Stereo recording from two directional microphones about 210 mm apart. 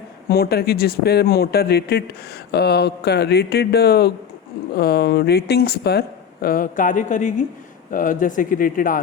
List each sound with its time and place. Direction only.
0.3 s speech: 50° left (ahead or behind)